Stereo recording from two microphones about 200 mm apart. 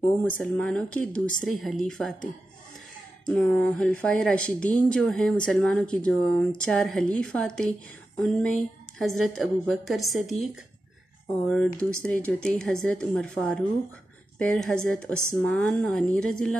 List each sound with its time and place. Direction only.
0.2 s speech: 5° left (ahead or behind)
3.3 s speech: 5° left (ahead or behind)
8.9 s speech: centre (ahead or behind)